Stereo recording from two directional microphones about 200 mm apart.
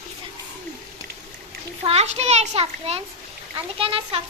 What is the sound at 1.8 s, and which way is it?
A child's voice, 30° right (ahead or behind).